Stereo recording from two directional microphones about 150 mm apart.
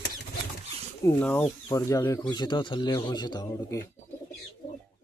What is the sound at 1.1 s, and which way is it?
Speech, 10° left (ahead or behind).